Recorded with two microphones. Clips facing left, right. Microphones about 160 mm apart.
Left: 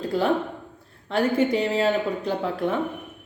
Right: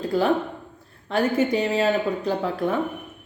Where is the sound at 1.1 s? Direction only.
30° left (ahead or behind).